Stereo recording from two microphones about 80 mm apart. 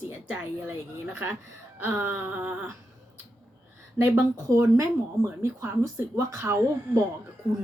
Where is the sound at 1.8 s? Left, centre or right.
Right.